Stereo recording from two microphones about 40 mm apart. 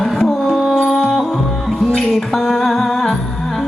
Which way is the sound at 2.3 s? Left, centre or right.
Centre.